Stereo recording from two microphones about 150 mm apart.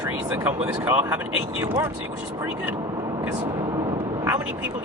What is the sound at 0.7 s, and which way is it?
Speech, 10° right (ahead or behind).